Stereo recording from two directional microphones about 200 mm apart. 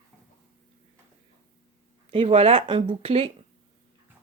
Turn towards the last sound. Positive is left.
turn(degrees=-30)  # may be behind; listen again after turning